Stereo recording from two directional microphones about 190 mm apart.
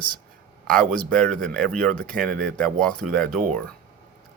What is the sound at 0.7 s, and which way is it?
Speech, 5° left (ahead or behind).